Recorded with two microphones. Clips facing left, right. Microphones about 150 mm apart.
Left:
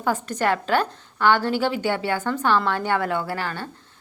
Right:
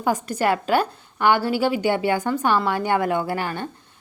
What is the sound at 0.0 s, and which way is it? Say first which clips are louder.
A woman's voice: right 1 dB; 10° right (ahead or behind).